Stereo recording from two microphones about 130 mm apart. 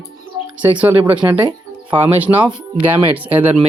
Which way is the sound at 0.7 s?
10° right (ahead or behind).